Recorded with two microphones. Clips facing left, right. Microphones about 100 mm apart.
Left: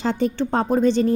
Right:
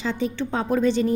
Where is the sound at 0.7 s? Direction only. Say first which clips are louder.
Left 2 dB; 30° left (ahead or behind).